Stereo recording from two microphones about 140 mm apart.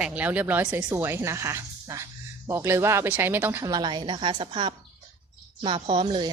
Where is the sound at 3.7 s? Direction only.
30° right (ahead or behind).